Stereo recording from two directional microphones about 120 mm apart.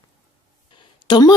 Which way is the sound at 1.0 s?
35° left (ahead or behind).